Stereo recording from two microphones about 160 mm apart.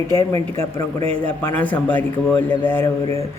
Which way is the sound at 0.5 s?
20° left (ahead or behind).